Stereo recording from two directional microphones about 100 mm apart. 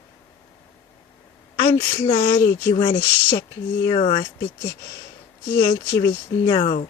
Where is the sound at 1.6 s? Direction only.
25° left (ahead or behind).